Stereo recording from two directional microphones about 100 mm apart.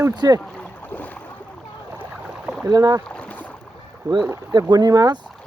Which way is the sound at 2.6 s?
40° right (ahead or behind).